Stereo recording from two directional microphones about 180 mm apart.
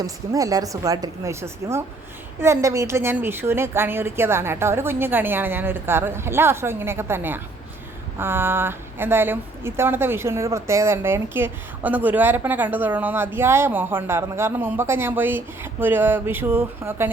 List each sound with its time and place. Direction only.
0.0 s a woman's voice: 20° right (ahead or behind)